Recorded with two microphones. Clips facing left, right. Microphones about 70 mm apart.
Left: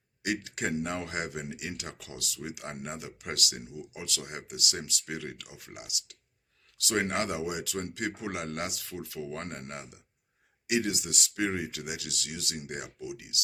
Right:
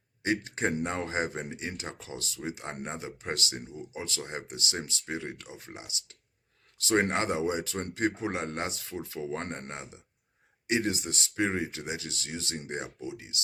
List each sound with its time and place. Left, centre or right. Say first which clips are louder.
0.2 s speech: right 3 dB; right